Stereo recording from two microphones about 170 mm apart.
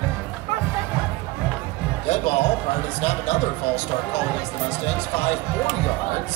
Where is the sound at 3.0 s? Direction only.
40° left (ahead or behind).